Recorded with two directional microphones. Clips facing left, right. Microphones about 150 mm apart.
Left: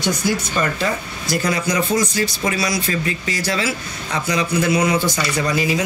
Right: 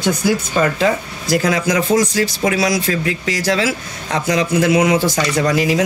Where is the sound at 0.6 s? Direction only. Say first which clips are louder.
Right 5 dB; 90° right.